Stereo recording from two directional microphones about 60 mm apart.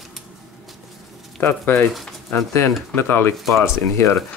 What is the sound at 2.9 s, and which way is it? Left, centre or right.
Speech, left.